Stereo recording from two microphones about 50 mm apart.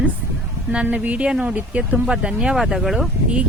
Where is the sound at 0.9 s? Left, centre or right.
Right.